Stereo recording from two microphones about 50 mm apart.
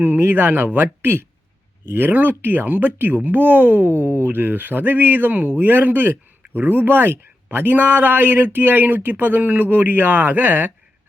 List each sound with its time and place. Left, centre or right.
0.0 s speech: right